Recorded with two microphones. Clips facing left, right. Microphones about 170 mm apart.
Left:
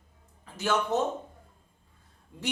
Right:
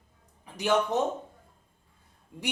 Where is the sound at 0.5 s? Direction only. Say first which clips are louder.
Right 2 dB; 15° right (ahead or behind).